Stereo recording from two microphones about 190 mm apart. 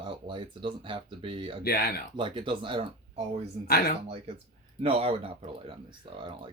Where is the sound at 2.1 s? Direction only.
25° right (ahead or behind).